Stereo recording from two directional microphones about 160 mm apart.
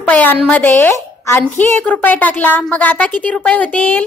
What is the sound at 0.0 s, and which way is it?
A woman's voice, 10° left (ahead or behind).